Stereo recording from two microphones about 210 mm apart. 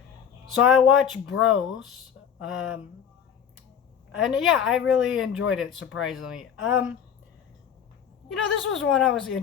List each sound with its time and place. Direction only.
0.6 s speech: centre (ahead or behind)
4.2 s speech: centre (ahead or behind)
8.3 s speech: centre (ahead or behind)